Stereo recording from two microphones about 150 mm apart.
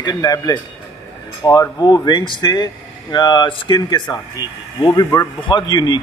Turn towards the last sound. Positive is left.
turn(degrees=30)  # may be behind; listen again after turning